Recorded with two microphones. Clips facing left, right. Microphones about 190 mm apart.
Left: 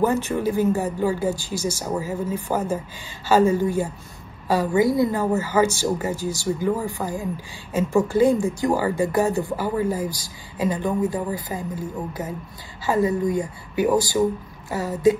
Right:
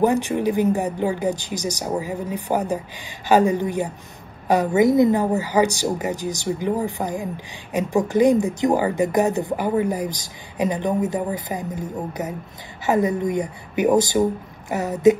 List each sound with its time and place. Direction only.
0.0 s speech: 15° right (ahead or behind)